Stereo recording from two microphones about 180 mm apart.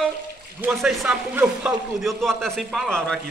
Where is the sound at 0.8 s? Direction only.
Centre (ahead or behind).